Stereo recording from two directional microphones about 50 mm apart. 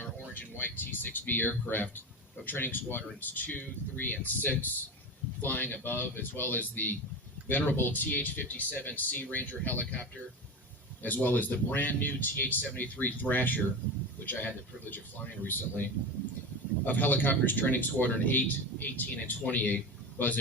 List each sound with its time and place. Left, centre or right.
0.3 s speech: left